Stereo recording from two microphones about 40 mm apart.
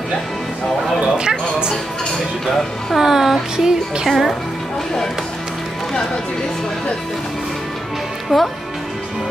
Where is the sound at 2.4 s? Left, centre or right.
Centre.